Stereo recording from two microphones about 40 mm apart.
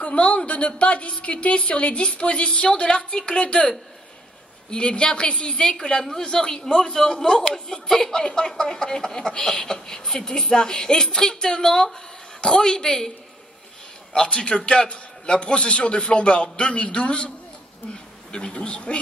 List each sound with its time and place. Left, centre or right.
0.0 s a sound: left
0.5 s a woman's voice: left; by 13.1 s centre
14.1 s a woman's voice: centre
18.3 s a woman's voice: left